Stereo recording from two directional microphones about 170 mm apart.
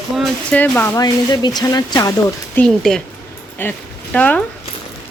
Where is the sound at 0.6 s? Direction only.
10° left (ahead or behind).